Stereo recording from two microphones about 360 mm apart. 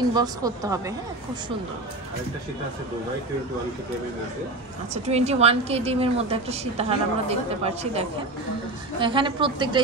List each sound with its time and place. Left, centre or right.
0.1 s a woman's voice: centre
4.9 s a woman's voice: centre